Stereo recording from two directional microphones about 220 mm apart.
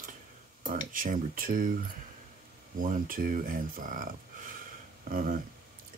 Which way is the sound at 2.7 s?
40° right (ahead or behind).